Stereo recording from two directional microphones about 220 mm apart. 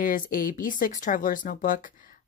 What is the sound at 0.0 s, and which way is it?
Speech, 40° left (ahead or behind).